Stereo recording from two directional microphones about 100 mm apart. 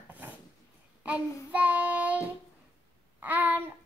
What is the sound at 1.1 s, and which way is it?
Child singing, 30° left (ahead or behind).